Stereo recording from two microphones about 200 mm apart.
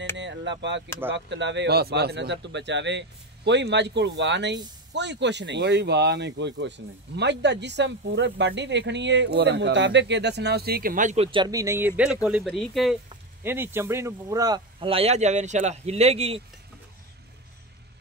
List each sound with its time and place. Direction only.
0.2 s a sound: 65° right (ahead or behind)
1.1 s speech: 60° right (ahead or behind); by 11.2 s 40° right (ahead or behind)
11.3 s speech: 20° right (ahead or behind); by 12.9 s centre (ahead or behind)
13.4 s speech: 10° right (ahead or behind); by 16.4 s 30° right (ahead or behind)